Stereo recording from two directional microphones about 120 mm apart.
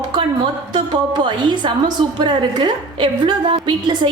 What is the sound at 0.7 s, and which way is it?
A woman's voice, 40° right (ahead or behind).